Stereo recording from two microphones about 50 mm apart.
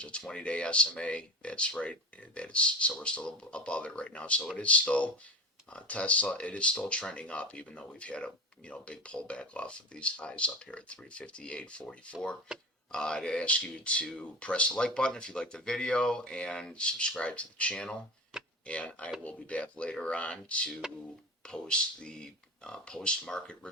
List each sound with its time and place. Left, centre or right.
0.0 s speech: centre
12.5 s speech: centre
12.9 s speech: centre